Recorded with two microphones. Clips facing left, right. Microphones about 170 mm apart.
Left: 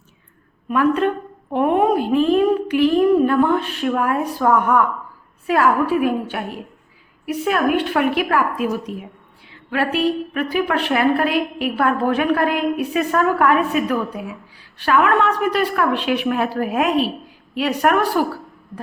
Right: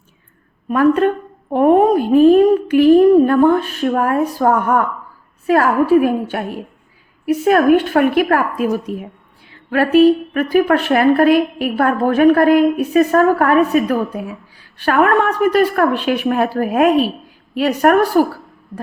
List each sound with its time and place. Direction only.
0.7 s a woman's voice: 45° right (ahead or behind)